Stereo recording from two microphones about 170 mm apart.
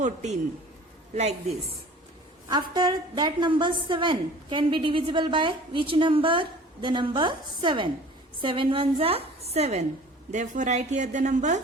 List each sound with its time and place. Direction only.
0.0 s a woman's voice: 45° right (ahead or behind)
2.5 s a woman's voice: 25° right (ahead or behind); by 11.6 s 45° right (ahead or behind)